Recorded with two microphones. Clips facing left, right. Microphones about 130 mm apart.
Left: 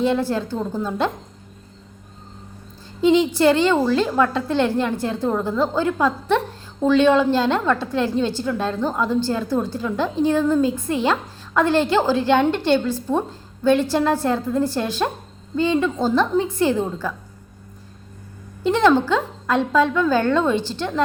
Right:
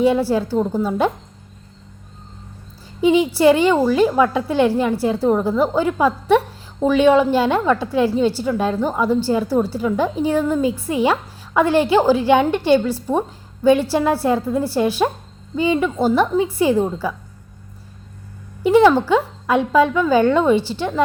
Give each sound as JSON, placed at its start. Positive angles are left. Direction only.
{"t": 0.0, "sound": "a woman's voice", "side_deg": -10}
{"t": 3.0, "sound": "a woman's voice", "side_deg": -10}
{"t": 18.6, "sound": "a woman's voice", "side_deg": -10}